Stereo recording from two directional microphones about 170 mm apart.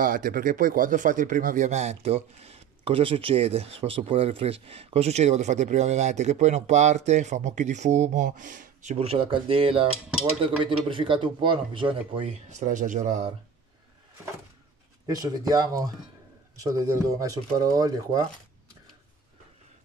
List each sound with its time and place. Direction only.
0.0 s speech: 55° right (ahead or behind)
15.0 s speech: 20° right (ahead or behind)